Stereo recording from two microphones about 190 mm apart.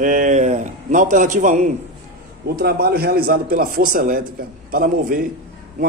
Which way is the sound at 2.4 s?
55° right (ahead or behind).